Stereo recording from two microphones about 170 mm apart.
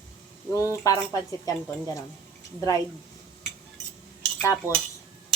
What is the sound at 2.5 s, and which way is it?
Speech, 20° left (ahead or behind).